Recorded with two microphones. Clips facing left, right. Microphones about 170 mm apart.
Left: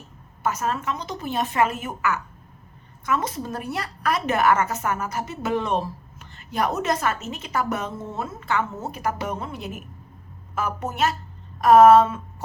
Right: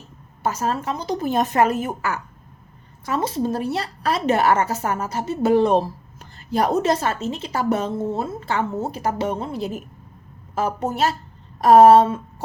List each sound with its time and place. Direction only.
0.4 s a woman's voice: 30° right (ahead or behind)